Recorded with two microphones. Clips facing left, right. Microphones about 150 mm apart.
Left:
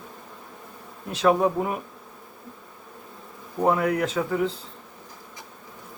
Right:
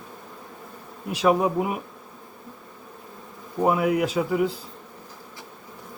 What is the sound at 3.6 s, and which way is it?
Speech, 10° right (ahead or behind).